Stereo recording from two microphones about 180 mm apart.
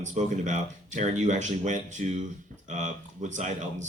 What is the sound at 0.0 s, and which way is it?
Speech, 45° right (ahead or behind).